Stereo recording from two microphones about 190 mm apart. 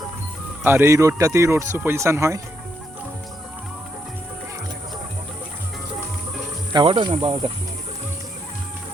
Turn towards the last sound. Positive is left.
turn(degrees=-25)  # may be behind; listen again after turning